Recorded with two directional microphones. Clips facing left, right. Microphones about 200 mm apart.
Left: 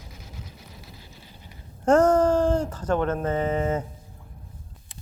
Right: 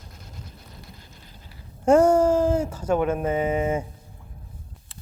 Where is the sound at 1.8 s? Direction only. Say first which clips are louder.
Right 1 dB; 10° right (ahead or behind).